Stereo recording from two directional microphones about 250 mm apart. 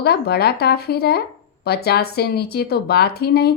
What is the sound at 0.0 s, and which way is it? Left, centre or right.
A woman's voice, left.